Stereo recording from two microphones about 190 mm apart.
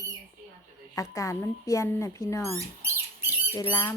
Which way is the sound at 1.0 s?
15° left (ahead or behind).